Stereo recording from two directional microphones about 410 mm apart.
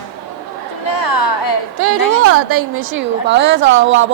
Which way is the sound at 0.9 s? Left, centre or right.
Left.